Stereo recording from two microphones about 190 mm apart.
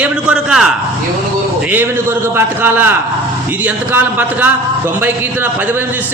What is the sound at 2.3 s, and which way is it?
Speech, 10° right (ahead or behind).